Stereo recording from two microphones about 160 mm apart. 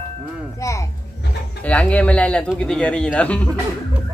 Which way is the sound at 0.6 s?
20° left (ahead or behind).